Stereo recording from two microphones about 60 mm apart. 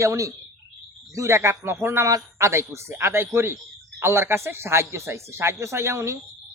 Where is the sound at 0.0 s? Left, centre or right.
Right.